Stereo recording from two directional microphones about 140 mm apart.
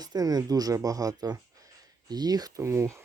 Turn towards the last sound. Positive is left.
turn(degrees=-20)  # may be behind; listen again after turning